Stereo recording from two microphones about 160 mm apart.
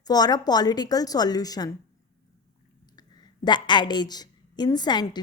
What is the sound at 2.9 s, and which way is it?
A woman's voice, 25° left (ahead or behind).